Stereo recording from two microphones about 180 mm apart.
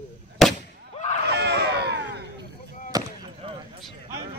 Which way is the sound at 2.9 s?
20° right (ahead or behind).